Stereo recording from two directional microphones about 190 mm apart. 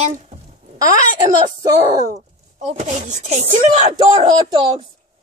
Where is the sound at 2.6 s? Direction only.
40° right (ahead or behind).